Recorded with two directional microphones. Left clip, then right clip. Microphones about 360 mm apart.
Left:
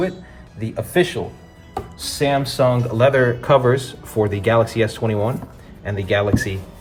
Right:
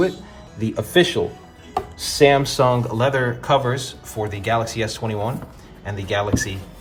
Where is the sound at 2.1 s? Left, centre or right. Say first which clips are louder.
Right 3 dB; centre.